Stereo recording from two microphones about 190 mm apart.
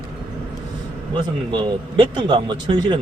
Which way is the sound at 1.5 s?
25° right (ahead or behind).